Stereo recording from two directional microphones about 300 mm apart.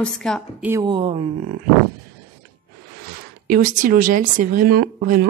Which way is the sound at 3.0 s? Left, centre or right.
Right.